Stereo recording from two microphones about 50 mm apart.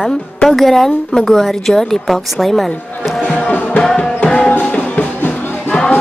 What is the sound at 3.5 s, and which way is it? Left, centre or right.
Music, left.